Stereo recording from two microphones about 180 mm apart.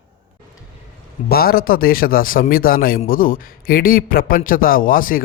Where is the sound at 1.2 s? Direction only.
55° left (ahead or behind).